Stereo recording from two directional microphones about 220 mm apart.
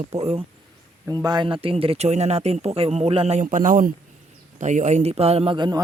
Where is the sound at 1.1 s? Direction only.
15° right (ahead or behind).